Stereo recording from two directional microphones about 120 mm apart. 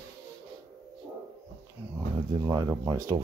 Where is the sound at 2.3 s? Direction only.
30° right (ahead or behind).